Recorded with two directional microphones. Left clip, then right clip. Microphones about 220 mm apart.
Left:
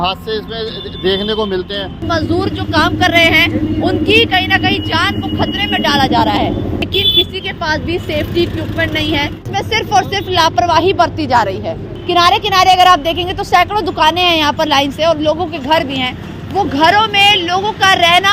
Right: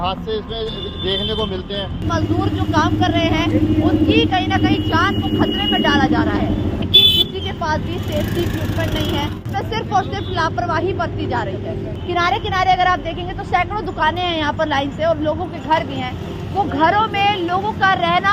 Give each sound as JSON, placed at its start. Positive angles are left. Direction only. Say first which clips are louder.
{"t": 1.0, "sound": "speech", "louder": "left 6 dB", "side_deg": 50}
{"t": 9.0, "sound": "speech", "louder": "left 6 dB", "side_deg": 55}